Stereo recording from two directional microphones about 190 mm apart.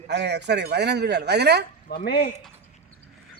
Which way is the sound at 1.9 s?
60° left (ahead or behind).